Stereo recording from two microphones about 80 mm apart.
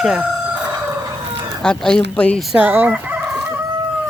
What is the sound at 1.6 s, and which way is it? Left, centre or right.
Speech, centre.